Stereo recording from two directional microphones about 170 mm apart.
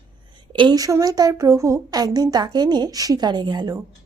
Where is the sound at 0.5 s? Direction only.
25° right (ahead or behind).